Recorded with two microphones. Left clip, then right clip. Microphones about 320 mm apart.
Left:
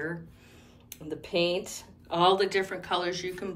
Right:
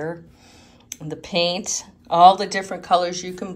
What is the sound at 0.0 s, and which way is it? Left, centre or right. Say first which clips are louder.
Speech: right 6 dB; centre.